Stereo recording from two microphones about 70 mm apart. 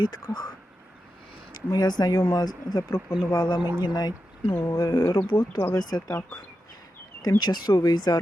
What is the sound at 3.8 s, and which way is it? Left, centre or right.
Speech, left.